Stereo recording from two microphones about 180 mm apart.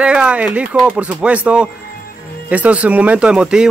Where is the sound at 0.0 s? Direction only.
5° right (ahead or behind).